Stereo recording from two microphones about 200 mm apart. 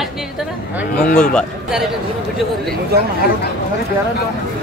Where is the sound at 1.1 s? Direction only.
5° left (ahead or behind).